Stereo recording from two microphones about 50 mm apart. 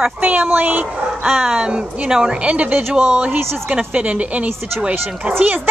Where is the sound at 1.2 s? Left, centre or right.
Centre.